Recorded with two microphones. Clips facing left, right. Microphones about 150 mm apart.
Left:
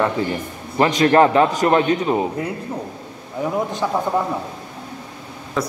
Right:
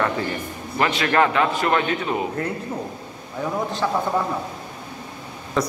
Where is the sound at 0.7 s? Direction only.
35° left (ahead or behind).